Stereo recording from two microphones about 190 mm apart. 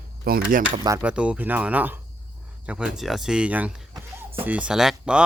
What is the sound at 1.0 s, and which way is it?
Speech, 5° right (ahead or behind).